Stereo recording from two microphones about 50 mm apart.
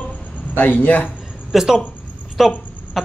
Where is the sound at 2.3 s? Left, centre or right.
Centre.